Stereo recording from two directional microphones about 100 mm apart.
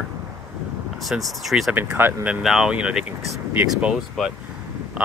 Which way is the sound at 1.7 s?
15° right (ahead or behind).